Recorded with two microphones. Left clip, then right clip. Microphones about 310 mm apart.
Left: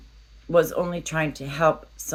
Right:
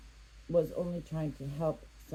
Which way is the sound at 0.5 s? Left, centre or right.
Left.